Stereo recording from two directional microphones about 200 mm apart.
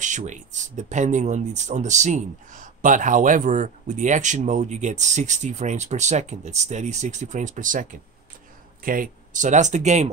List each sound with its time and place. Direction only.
0.0 s speech: 40° right (ahead or behind)